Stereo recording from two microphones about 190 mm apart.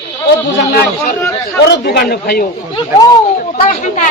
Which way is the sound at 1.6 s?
55° left (ahead or behind).